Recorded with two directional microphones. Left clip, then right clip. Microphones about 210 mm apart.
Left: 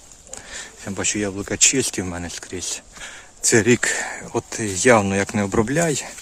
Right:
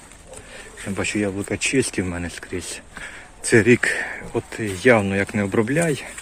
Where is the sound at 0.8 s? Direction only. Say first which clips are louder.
Right 1 dB; 20° left (ahead or behind).